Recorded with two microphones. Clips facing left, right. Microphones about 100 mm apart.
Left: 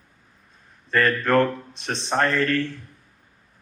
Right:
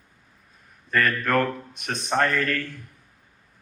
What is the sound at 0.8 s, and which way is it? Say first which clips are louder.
A man's voice: left 3 dB; 30° left (ahead or behind).